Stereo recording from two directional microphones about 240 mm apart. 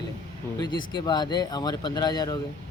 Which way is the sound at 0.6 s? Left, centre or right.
Centre.